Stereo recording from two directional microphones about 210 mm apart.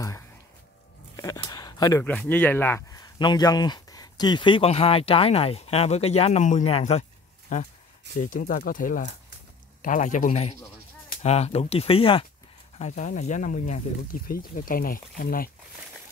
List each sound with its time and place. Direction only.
1.1 s speech: 15° left (ahead or behind); by 15.5 s 45° left (ahead or behind)